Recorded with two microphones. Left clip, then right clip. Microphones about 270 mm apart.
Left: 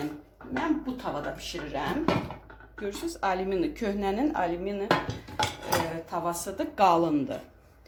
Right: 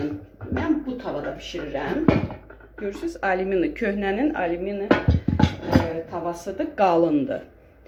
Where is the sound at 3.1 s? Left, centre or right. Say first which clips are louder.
Right 5 dB; centre.